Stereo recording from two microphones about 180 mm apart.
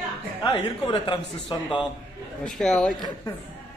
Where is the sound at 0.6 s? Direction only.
30° left (ahead or behind).